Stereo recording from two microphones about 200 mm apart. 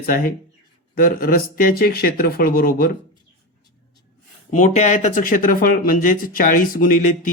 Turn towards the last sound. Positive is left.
turn(degrees=40)  # may be behind; listen again after turning